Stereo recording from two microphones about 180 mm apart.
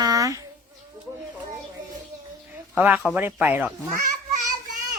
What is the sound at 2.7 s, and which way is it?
Speech, 5° right (ahead or behind).